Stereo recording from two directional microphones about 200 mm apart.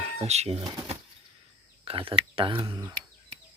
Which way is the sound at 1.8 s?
25° right (ahead or behind).